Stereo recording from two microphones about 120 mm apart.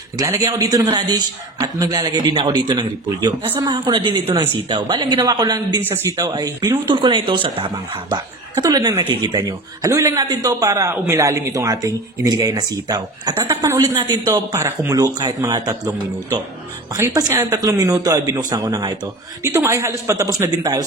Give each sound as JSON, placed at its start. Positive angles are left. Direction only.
{"t": 0.2, "sound": "a man's voice", "side_deg": -30}
{"t": 8.1, "sound": "a man's voice", "side_deg": -35}
{"t": 17.1, "sound": "a man's voice", "side_deg": -30}
{"t": 19.4, "sound": "speech", "side_deg": -25}